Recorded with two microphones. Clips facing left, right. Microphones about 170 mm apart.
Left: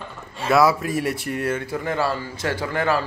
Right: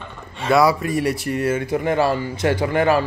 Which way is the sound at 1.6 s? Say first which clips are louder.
Right 5 dB; 20° right (ahead or behind).